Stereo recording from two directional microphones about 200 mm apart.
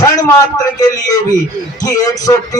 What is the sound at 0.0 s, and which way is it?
A man's voice, 15° left (ahead or behind).